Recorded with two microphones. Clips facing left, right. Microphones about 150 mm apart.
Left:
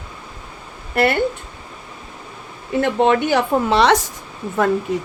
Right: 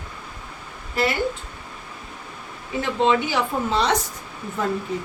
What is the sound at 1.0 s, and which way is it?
Speech, 65° left (ahead or behind).